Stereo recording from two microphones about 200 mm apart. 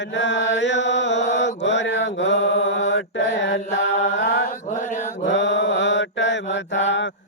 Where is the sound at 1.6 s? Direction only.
65° left (ahead or behind).